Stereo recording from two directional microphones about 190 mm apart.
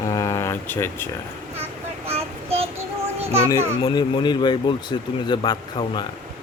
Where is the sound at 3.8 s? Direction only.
25° left (ahead or behind).